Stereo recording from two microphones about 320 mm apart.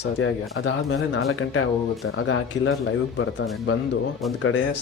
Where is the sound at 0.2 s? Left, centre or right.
Left.